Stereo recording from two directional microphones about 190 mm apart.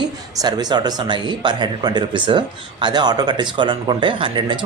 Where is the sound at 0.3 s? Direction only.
20° right (ahead or behind).